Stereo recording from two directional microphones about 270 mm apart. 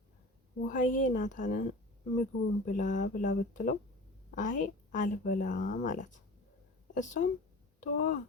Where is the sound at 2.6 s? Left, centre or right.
Left.